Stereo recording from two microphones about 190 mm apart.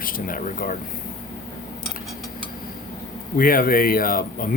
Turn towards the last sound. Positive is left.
turn(degrees=50)  # may be behind; listen again after turning